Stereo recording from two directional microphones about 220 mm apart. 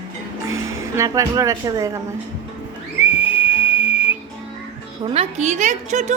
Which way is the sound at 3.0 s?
10° right (ahead or behind).